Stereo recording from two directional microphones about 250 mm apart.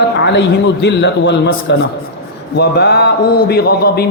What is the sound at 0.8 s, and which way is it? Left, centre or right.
Mantra, left.